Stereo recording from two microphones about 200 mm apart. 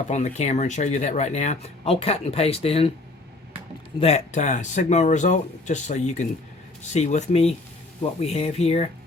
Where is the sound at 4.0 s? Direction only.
35° left (ahead or behind).